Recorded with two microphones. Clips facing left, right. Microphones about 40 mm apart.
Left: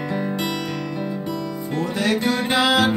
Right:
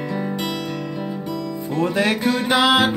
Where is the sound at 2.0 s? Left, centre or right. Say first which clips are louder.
Left 2 dB; centre.